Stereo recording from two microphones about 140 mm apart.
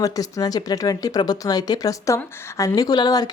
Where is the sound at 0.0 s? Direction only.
25° left (ahead or behind).